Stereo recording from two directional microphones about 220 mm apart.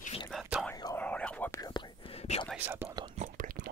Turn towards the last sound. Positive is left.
turn(degrees=-35)  # may be behind; listen again after turning